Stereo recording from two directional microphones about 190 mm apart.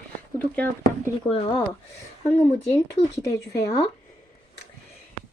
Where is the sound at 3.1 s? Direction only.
15° left (ahead or behind).